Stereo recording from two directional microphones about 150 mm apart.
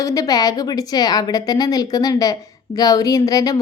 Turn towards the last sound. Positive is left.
turn(degrees=25)  # may be behind; listen again after turning